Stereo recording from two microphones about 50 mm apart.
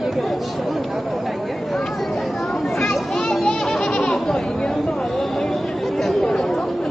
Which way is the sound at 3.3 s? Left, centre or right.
Centre.